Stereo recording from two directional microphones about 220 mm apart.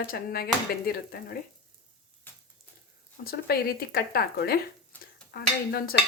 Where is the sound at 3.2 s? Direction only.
45° left (ahead or behind).